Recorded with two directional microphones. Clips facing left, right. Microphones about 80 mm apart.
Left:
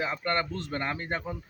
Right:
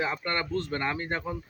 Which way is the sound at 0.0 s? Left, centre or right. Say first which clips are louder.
Left 1 dB; centre.